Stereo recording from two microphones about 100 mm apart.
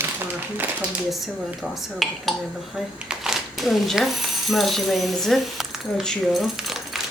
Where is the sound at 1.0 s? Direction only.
Centre (ahead or behind).